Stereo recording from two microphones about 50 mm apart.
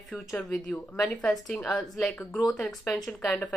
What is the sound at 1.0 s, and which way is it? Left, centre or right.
A woman's voice, centre.